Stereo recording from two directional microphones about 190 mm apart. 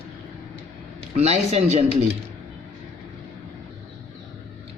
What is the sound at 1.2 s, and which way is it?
Speech, 35° right (ahead or behind).